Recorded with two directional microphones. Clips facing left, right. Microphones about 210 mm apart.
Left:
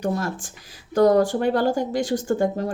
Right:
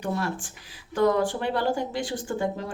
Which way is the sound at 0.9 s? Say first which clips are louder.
Left 6 dB; 40° left (ahead or behind).